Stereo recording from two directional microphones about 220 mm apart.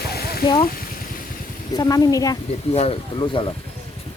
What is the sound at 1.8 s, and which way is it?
Speech, 15° left (ahead or behind).